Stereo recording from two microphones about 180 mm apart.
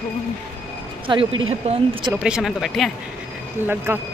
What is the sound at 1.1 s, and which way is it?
Speech, 25° right (ahead or behind).